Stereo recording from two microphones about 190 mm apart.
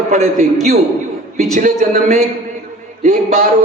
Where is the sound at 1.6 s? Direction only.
45° right (ahead or behind).